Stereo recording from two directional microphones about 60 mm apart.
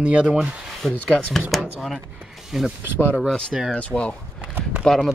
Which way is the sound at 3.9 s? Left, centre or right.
Left.